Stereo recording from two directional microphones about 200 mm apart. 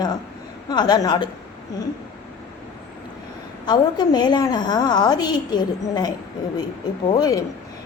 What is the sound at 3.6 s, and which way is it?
A woman's voice, 20° left (ahead or behind).